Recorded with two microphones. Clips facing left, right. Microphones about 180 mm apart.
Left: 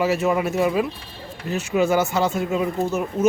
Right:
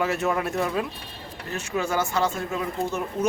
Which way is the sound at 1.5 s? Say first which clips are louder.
Left 7 dB; 20° left (ahead or behind).